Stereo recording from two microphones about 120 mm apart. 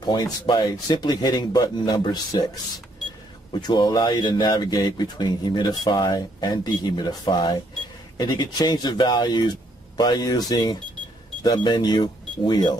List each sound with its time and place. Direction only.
0.0 s speech: 35° left (ahead or behind)
3.5 s speech: 35° left (ahead or behind)